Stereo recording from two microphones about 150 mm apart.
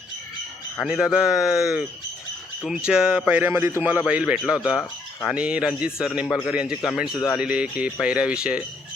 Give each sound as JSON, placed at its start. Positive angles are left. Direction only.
{"t": 0.8, "sound": "a man's voice", "side_deg": -5}